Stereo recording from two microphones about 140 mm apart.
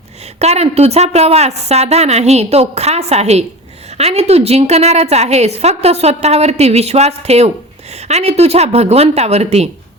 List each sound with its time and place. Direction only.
0.3 s a woman's voice: 50° right (ahead or behind)